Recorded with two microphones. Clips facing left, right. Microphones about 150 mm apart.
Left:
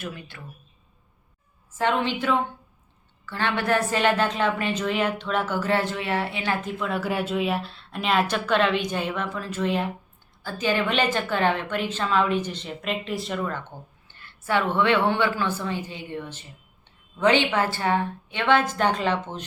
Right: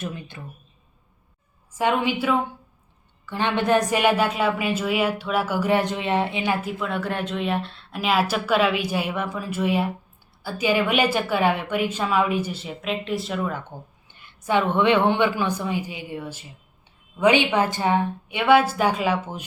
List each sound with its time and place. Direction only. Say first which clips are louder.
0.0 s speech: right 3 dB; 20° right (ahead or behind)
1.8 s a woman's voice: right 2 dB; 10° right (ahead or behind)